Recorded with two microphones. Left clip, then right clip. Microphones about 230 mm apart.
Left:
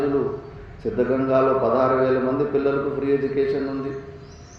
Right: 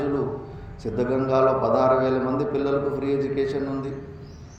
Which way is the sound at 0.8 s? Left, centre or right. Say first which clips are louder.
Left 2 dB; right.